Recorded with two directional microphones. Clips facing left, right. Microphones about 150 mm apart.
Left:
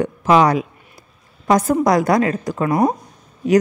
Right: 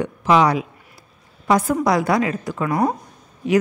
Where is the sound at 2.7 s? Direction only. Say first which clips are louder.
Left 3 dB; 20° left (ahead or behind).